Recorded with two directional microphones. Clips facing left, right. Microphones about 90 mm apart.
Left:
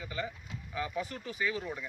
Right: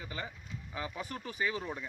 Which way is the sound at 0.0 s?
30° right (ahead or behind).